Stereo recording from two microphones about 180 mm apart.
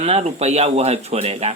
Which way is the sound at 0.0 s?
35° right (ahead or behind).